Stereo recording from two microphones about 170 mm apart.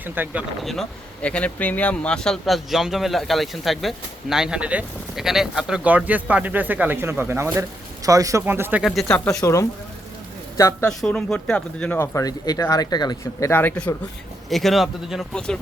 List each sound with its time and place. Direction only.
0.0 s speech: 10° right (ahead or behind)
0.6 s speech: centre (ahead or behind)
8.8 s speech: 5° left (ahead or behind)
9.4 s speech: 20° left (ahead or behind)
10.8 s speech: 5° left (ahead or behind); by 13.5 s 25° left (ahead or behind)
13.5 s speech: 10° left (ahead or behind)